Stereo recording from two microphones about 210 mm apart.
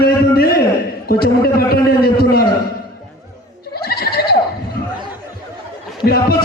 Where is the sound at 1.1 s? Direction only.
50° left (ahead or behind).